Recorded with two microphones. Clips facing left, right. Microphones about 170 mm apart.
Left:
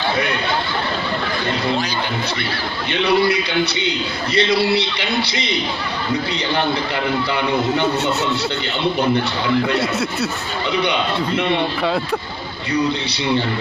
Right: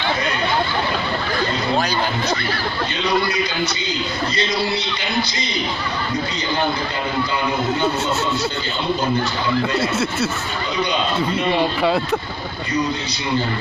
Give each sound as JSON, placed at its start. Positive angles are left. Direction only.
{"t": 2.9, "sound": "a man's voice", "side_deg": 65}
{"t": 9.8, "sound": "speech", "side_deg": 0}